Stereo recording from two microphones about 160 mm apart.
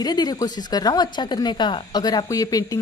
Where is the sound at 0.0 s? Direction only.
25° left (ahead or behind).